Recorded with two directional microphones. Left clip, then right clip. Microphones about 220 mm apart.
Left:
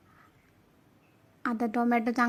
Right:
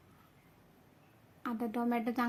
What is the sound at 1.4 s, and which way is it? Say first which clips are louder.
Speech: left 7 dB; 30° left (ahead or behind).